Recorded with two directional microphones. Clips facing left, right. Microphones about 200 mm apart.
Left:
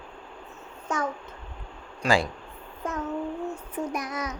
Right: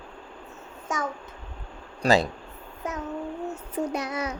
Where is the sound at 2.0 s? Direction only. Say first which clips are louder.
Right 3 dB; 35° right (ahead or behind).